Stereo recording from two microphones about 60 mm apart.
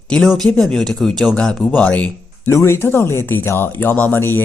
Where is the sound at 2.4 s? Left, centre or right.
Left.